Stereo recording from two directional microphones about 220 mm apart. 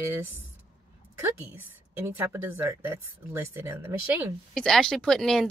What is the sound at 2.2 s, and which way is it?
Speech, 10° right (ahead or behind).